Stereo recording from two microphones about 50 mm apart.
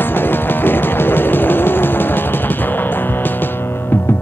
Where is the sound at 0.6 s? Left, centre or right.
Left.